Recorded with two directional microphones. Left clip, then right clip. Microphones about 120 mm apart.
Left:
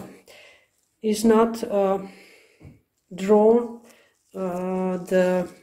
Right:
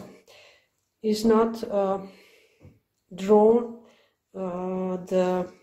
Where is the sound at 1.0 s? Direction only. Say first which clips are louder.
Left 3 dB; centre (ahead or behind).